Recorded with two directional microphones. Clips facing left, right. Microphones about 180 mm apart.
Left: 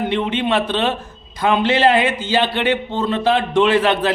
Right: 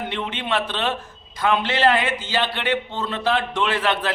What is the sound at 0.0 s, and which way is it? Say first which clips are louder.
A man's voice: left 9 dB; 20° left (ahead or behind).